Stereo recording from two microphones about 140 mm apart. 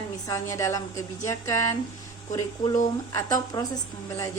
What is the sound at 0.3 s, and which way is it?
A woman's voice, 20° left (ahead or behind).